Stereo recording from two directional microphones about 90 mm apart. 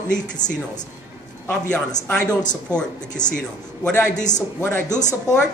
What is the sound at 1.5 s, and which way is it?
Speech, 15° left (ahead or behind).